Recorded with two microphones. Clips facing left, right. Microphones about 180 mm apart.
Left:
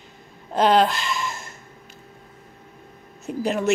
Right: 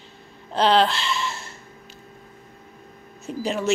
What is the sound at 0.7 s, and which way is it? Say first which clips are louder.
Speech: even; 45° left (ahead or behind).